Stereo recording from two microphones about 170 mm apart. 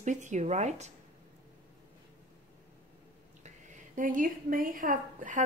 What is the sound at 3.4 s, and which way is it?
A woman's voice, 50° right (ahead or behind).